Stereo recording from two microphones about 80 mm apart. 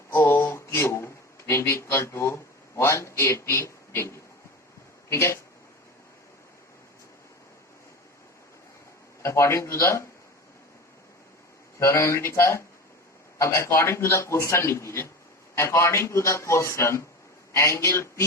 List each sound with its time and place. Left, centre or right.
0.1 s a sound: left
5.0 s speech: left
9.2 s a man's voice: left
11.8 s a man's voice: left